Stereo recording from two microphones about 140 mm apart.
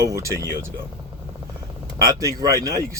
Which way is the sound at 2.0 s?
25° right (ahead or behind).